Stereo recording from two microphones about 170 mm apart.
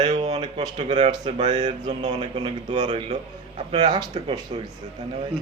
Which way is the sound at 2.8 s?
40° right (ahead or behind).